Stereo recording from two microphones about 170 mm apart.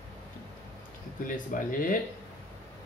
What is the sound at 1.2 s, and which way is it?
Speech, 50° left (ahead or behind).